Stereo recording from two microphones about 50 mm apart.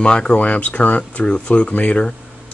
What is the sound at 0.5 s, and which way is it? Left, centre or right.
Speech, left.